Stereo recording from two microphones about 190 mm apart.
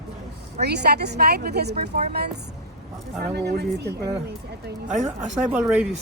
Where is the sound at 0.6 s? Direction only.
60° right (ahead or behind).